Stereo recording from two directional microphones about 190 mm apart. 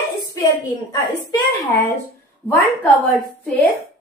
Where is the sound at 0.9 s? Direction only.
15° left (ahead or behind).